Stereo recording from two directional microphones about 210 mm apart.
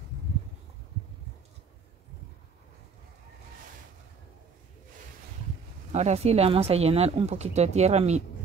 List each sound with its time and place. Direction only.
5.9 s speech: 30° right (ahead or behind)